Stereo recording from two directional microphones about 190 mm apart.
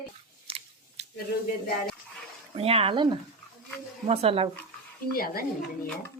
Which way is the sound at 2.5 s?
30° right (ahead or behind).